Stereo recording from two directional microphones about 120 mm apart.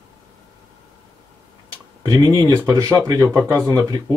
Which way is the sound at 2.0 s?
30° right (ahead or behind).